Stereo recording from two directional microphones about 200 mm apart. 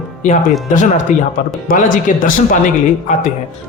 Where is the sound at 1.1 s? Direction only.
40° left (ahead or behind).